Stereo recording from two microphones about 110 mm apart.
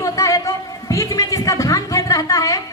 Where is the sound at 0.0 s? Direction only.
30° left (ahead or behind).